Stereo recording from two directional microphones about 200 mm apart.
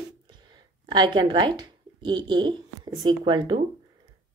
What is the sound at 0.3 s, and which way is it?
A woman's voice, 20° right (ahead or behind).